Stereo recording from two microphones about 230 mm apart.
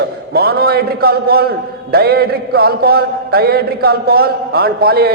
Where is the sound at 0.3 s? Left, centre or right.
Right.